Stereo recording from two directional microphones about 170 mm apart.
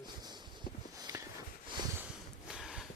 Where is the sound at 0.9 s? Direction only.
20° right (ahead or behind).